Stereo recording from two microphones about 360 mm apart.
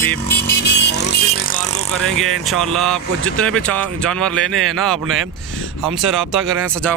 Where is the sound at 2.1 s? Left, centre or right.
Centre.